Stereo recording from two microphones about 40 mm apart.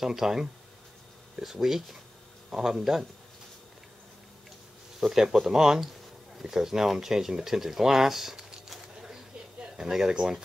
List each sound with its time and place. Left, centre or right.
0.0 s speech: centre
5.0 s speech: centre
9.0 s a sound: centre
10.1 s speech: right